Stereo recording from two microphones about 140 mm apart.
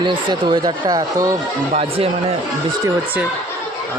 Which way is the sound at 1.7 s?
45° right (ahead or behind).